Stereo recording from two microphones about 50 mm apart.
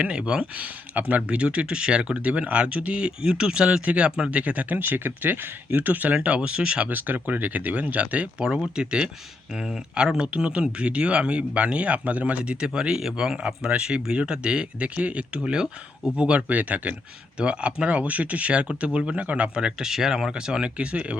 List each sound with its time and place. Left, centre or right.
0.0 s speech: right
0.9 s speech: right
4.8 s speech: right
6.2 s speech: right
6.9 s speech: right
8.4 s speech: centre
15.4 s speech: centre